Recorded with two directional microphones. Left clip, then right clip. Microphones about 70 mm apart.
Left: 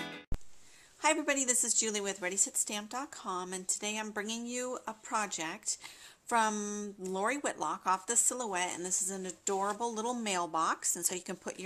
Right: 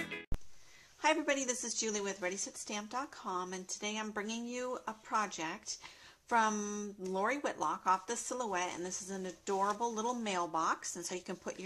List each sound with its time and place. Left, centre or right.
1.0 s a woman's voice: left